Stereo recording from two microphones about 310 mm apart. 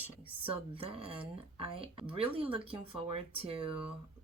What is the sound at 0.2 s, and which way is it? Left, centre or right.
Speech, centre.